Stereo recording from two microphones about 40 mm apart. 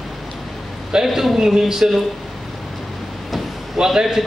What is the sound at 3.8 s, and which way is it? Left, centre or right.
Speech, centre.